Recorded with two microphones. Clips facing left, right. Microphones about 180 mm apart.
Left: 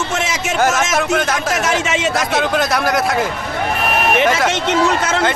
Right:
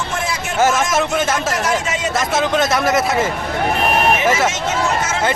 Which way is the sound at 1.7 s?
90° left.